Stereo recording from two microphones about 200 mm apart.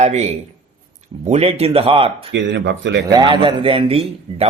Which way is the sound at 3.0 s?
20° right (ahead or behind).